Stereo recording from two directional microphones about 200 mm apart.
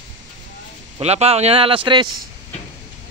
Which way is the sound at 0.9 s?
30° right (ahead or behind).